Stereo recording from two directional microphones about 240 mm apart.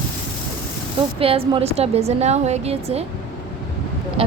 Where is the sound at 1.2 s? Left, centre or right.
Right.